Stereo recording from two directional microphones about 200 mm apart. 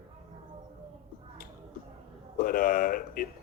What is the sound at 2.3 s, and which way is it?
Speech, 45° left (ahead or behind).